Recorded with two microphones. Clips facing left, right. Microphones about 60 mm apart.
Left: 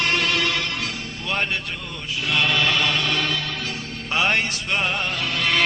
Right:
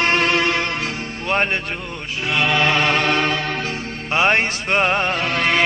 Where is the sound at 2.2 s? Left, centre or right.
Right.